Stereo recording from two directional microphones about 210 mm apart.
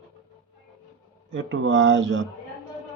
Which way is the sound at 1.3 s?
65° right (ahead or behind).